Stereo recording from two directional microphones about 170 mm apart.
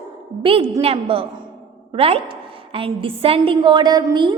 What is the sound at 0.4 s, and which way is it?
A woman's voice, 35° right (ahead or behind).